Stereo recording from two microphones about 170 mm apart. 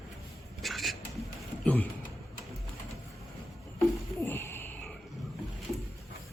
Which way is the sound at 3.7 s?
15° left (ahead or behind).